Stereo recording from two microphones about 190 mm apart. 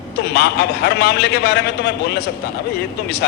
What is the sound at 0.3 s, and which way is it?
A man's voice, 60° left (ahead or behind).